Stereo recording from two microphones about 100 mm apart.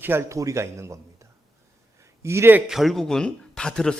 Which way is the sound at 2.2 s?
25° right (ahead or behind).